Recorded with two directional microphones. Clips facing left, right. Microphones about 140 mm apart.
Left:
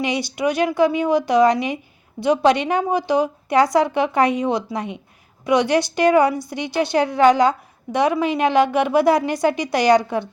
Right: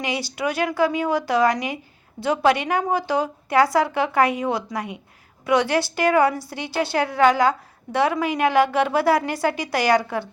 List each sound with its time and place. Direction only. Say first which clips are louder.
0.0 s a woman's voice: left 4 dB; 20° left (ahead or behind)